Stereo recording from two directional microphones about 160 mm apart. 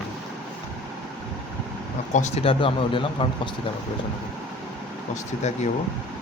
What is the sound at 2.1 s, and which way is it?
Speech, 45° left (ahead or behind).